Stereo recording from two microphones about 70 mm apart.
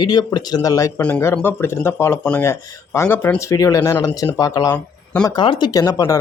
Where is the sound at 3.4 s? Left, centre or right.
Left.